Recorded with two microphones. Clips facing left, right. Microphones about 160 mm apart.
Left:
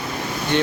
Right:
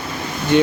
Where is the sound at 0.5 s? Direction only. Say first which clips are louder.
Right 6 dB; 10° right (ahead or behind).